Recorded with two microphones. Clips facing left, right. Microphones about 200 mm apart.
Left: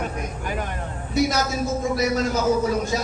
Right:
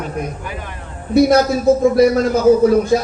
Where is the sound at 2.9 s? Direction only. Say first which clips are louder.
Right 10 dB; 60° right (ahead or behind).